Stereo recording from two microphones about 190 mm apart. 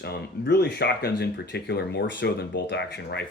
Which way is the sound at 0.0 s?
60° left (ahead or behind).